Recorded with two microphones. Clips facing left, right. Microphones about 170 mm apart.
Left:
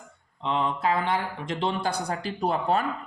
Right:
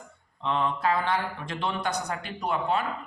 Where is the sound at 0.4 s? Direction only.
20° left (ahead or behind); by 2.8 s 35° left (ahead or behind).